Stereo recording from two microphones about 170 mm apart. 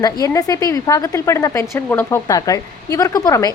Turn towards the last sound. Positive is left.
turn(degrees=20)  # may be behind; listen again after turning